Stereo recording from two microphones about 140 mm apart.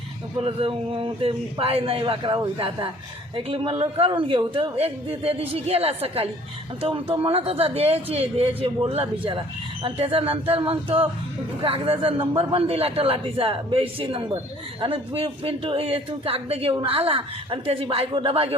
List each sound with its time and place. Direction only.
0.3 s speech: 40° right (ahead or behind)